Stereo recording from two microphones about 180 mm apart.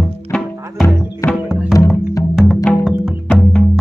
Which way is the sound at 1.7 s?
15° left (ahead or behind).